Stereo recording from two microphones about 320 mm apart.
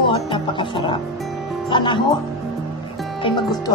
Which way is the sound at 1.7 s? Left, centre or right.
Centre.